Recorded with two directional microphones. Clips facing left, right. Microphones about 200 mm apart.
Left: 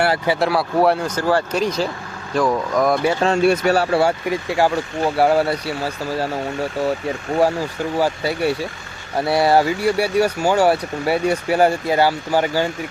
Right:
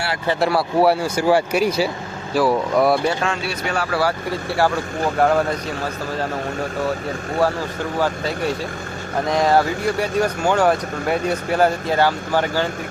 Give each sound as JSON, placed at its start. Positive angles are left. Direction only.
{"t": 0.3, "sound": "speech", "side_deg": 0}
{"t": 3.4, "sound": "speech", "side_deg": 50}
{"t": 3.8, "sound": "speech", "side_deg": 25}
{"t": 4.3, "sound": "speech", "side_deg": 15}
{"t": 7.9, "sound": "speech", "side_deg": 10}